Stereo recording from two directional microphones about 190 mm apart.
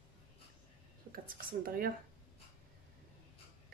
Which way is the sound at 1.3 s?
50° right (ahead or behind).